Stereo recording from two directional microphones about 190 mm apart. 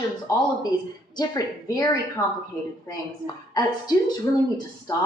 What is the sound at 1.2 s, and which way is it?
A woman's voice, 20° left (ahead or behind).